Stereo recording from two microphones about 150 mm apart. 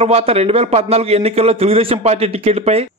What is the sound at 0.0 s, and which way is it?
A man's voice, 40° right (ahead or behind).